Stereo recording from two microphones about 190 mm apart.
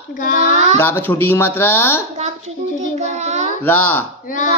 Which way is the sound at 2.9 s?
35° right (ahead or behind).